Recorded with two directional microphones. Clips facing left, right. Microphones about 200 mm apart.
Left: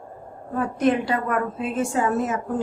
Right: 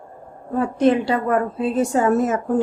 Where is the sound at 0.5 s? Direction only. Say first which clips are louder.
Right 4 dB; 30° right (ahead or behind).